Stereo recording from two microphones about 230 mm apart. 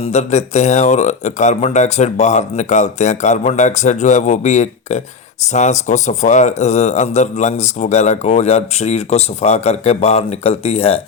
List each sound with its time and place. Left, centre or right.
0.0 s speech: left